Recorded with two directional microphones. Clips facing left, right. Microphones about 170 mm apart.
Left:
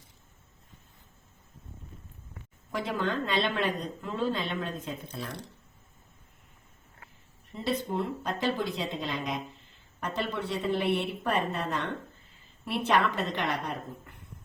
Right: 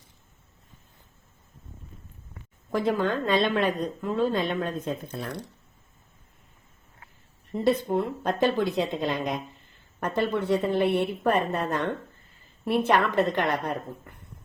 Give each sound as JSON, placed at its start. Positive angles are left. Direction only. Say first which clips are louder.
{"t": 2.7, "sound": "speech", "louder": "right 6 dB", "side_deg": -50}
{"t": 7.5, "sound": "speech", "louder": "right 7 dB", "side_deg": -50}